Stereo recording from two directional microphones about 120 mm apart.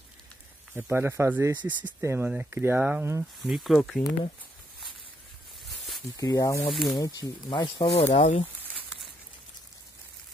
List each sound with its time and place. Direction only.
0.7 s speech: 15° right (ahead or behind)
3.4 s speech: centre (ahead or behind)
6.1 s speech: 30° left (ahead or behind)
6.7 s speech: centre (ahead or behind)
7.0 s speech: 30° left (ahead or behind)
8.1 s speech: 65° left (ahead or behind)